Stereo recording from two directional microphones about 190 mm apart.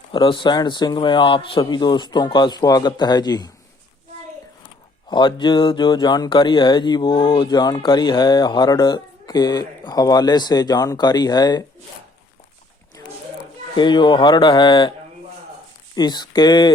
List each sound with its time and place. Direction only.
0.1 s speech: 25° left (ahead or behind)
5.0 s speech: 25° left (ahead or behind)
13.7 s speech: 25° left (ahead or behind)
16.0 s speech: 20° left (ahead or behind)